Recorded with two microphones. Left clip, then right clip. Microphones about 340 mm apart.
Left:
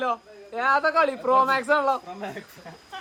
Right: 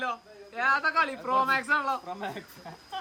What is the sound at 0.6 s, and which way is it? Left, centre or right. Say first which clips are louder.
A man's voice: left 4 dB; centre.